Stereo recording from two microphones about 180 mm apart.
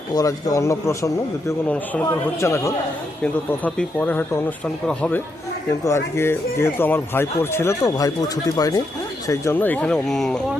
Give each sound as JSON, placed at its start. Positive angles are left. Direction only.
{"t": 0.1, "sound": "a man's voice", "side_deg": 20}